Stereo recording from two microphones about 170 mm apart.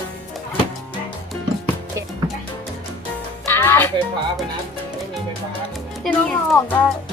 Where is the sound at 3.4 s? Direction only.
15° left (ahead or behind).